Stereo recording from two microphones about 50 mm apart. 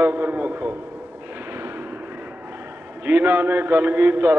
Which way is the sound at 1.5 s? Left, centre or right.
Right.